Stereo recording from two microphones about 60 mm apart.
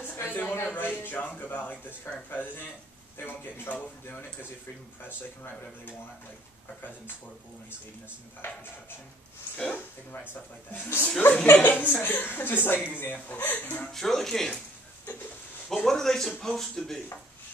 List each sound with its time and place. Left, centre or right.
0.0 s a sound: left
0.7 s a woman's voice: left
9.6 s a woman's voice: left
13.9 s speech: centre
15.7 s speech: centre